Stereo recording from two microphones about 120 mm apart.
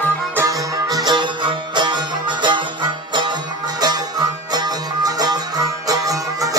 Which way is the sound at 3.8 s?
35° right (ahead or behind).